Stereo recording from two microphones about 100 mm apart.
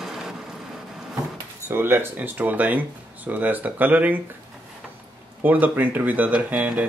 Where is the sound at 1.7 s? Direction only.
25° right (ahead or behind).